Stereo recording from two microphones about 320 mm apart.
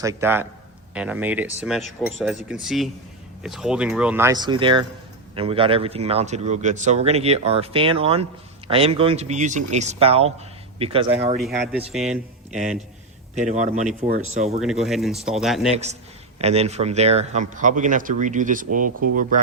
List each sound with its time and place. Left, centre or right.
0.0 s a man's voice: centre
11.3 s speech: centre
13.3 s a man's voice: right
14.6 s speech: centre
16.4 s a man's voice: centre
18.9 s speech: right
19.3 s a man's voice: right